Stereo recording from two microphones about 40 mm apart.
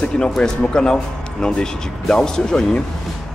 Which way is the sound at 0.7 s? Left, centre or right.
Left.